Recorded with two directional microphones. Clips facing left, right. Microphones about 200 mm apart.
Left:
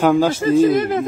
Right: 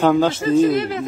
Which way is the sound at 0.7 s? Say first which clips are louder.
Left 4 dB; 50° left (ahead or behind).